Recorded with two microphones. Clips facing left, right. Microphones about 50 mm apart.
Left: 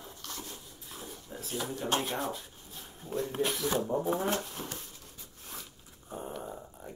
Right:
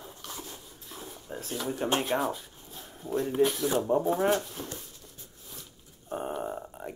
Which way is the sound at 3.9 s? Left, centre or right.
Right.